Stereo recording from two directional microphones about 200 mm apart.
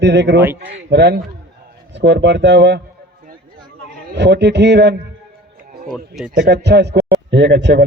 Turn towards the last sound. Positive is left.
turn(degrees=-60)  # may be behind; listen again after turning